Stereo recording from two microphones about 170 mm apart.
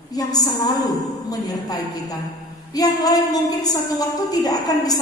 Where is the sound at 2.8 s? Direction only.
20° left (ahead or behind).